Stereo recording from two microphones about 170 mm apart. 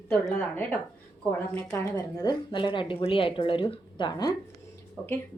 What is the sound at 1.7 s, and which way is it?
A woman's voice, 20° left (ahead or behind).